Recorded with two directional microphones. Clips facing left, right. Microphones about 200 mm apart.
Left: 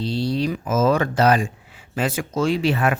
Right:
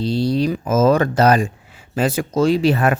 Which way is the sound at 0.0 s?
40° right (ahead or behind).